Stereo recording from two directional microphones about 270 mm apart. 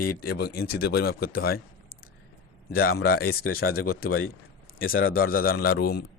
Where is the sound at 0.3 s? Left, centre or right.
Left.